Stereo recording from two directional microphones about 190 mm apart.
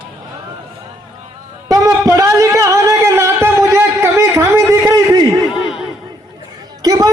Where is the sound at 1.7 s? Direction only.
15° right (ahead or behind).